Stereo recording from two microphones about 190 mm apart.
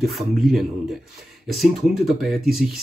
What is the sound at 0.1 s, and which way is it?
Speech, centre (ahead or behind).